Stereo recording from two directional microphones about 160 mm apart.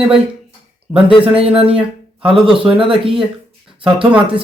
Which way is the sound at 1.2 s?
35° right (ahead or behind).